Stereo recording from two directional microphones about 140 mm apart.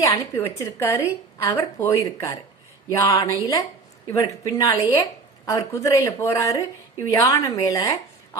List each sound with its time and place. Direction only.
0.0 s a woman's voice: 20° left (ahead or behind)